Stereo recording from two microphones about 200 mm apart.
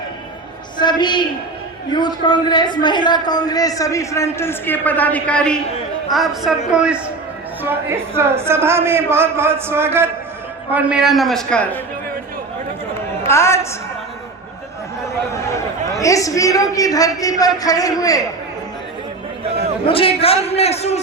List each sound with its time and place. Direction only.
0.8 s a woman's voice: 20° left (ahead or behind); by 11.8 s 5° left (ahead or behind)
13.2 s a woman's voice: 15° left (ahead or behind)
15.3 s a man's voice: 15° left (ahead or behind)
19.9 s a woman's voice: 30° left (ahead or behind)